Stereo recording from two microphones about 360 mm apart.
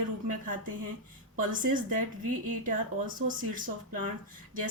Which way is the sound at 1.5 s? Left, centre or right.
Right.